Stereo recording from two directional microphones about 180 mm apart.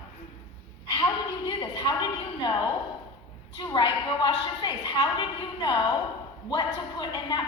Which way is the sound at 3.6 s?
25° left (ahead or behind).